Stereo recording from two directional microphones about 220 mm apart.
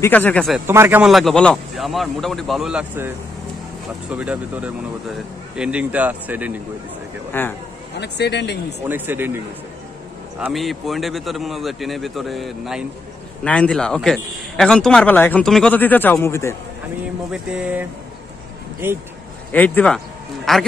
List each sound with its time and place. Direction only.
0.0 s speech: 5° left (ahead or behind)
0.7 s a man's voice: 10° right (ahead or behind)
4.1 s speech: 5° right (ahead or behind)
7.3 s speech: 10° left (ahead or behind)
8.0 s speech: 50° left (ahead or behind)
8.8 s speech: 10° right (ahead or behind)
10.4 s a man's voice: centre (ahead or behind)
17.3 s a man's voice: 5° right (ahead or behind)
19.5 s a man's voice: 10° left (ahead or behind)